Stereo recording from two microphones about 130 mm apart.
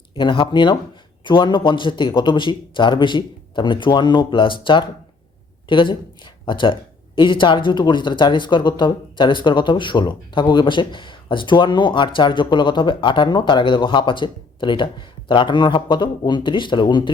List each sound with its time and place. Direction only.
0.2 s speech: 40° left (ahead or behind)